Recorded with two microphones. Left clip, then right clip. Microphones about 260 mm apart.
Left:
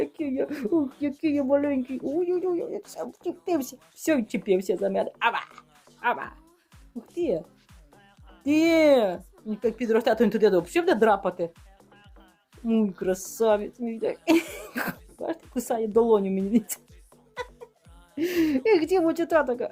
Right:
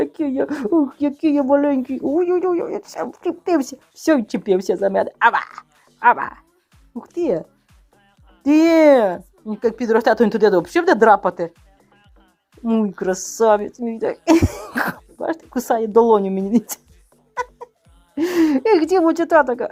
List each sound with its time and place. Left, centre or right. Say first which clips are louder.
0.0 s speech: right 7 dB; centre
8.4 s speech: right 8 dB; centre
12.6 s speech: right 6 dB; centre
17.3 s music: right 10 dB; centre
18.1 s speech: right 8 dB; centre